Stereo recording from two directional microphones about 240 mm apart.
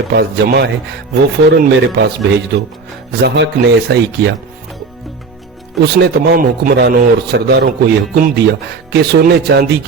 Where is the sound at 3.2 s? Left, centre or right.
Right.